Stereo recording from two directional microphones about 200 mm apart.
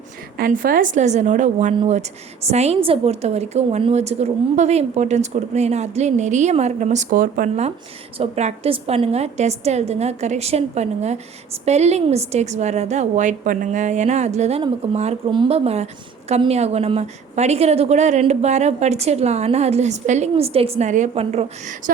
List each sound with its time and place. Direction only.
0.3 s a woman's voice: 45° right (ahead or behind)